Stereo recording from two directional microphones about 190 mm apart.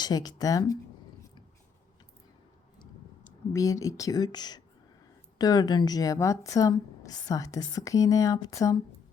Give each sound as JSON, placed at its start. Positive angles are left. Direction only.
{"t": 0.0, "sound": "speech", "side_deg": 20}
{"t": 3.5, "sound": "a woman's voice", "side_deg": 15}